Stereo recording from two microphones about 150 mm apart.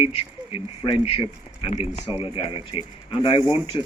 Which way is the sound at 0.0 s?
40° left (ahead or behind).